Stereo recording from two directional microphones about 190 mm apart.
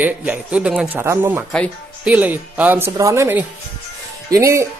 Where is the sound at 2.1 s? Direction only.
10° right (ahead or behind).